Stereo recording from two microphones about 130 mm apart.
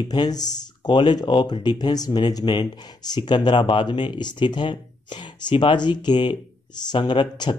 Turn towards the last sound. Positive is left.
turn(degrees=35)  # may be behind; listen again after turning